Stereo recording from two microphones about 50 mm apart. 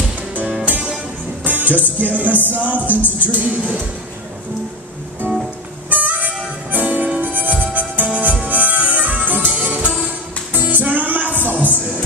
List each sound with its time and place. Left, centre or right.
0.3 s music: right
5.2 s music: right